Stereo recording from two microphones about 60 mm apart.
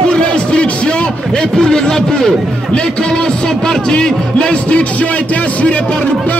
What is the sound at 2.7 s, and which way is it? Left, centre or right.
Speech, centre.